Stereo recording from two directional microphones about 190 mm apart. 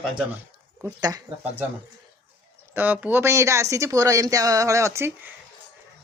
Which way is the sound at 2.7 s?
10° right (ahead or behind).